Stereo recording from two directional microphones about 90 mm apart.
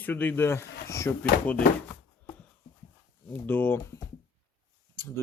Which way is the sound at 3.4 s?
20° left (ahead or behind).